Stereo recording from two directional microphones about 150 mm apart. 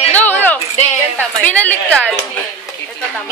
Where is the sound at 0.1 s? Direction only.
10° left (ahead or behind).